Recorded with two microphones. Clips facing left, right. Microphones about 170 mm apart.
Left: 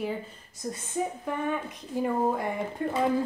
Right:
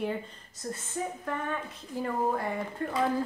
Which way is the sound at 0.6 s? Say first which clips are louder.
Left 3 dB; 15° left (ahead or behind).